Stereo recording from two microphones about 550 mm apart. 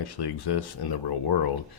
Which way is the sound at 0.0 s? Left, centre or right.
Left.